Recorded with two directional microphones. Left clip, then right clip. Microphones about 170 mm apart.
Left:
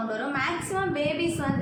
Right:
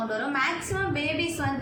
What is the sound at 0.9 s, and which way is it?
Speech, 10° right (ahead or behind).